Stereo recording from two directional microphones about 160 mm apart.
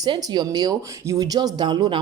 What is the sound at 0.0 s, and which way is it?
Speech, 25° right (ahead or behind).